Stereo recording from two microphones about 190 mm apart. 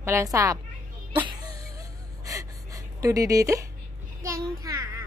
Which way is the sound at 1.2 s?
20° right (ahead or behind).